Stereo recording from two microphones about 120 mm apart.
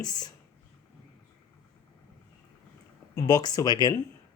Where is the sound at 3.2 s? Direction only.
30° left (ahead or behind).